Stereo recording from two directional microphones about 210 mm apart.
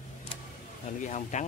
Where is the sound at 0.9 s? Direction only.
35° left (ahead or behind).